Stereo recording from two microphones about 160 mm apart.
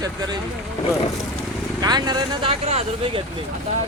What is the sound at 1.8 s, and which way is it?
Speech, 25° right (ahead or behind).